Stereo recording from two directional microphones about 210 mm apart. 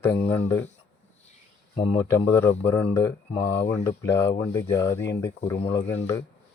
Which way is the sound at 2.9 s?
25° left (ahead or behind).